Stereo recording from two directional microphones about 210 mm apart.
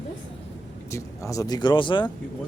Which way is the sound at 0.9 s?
15° left (ahead or behind).